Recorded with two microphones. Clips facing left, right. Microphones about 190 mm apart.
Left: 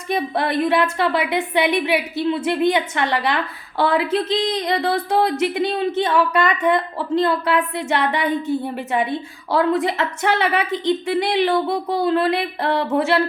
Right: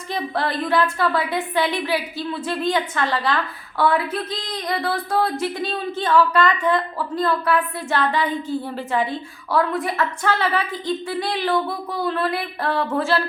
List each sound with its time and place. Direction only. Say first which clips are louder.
0.1 s speech: left 4 dB; 20° left (ahead or behind)